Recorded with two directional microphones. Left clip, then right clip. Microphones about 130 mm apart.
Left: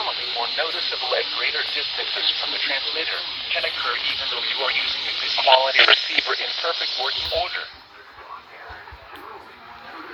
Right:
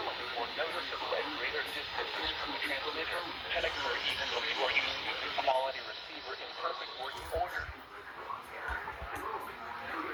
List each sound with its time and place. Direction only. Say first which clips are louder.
0.0 s speech: left 12 dB; 20° left (ahead or behind)
3.6 s speech: left 9 dB; 5° left (ahead or behind)
5.4 s speech: left 18 dB; 20° left (ahead or behind)